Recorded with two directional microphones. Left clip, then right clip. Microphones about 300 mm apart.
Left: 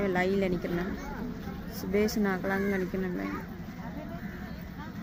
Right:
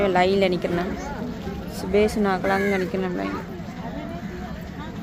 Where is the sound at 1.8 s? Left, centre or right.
Centre.